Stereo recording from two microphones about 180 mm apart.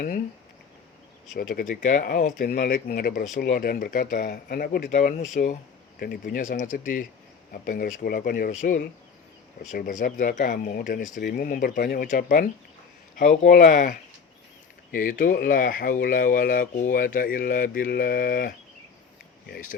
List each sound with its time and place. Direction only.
1.3 s speech: 50° left (ahead or behind)
6.0 s speech: 55° left (ahead or behind)